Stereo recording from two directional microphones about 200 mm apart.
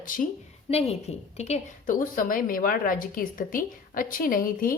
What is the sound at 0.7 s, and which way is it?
A woman's voice, 30° left (ahead or behind).